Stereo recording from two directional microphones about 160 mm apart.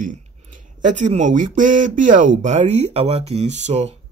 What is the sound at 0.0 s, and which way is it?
Speech, 55° right (ahead or behind).